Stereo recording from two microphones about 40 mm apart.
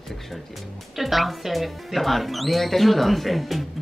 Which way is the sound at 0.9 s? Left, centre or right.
Centre.